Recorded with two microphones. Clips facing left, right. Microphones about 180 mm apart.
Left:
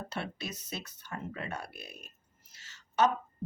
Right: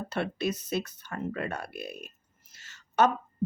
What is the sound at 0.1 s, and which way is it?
A woman's voice, 60° right (ahead or behind).